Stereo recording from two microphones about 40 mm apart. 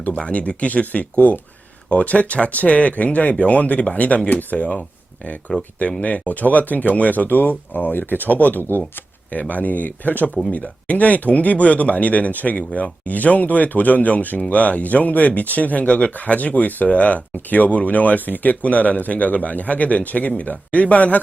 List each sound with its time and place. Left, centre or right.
0.2 s speech: left
5.5 s speech: left
6.0 s speech: left
9.3 s speech: left